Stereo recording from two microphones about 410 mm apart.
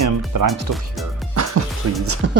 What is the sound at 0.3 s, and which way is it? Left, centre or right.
Speech, right.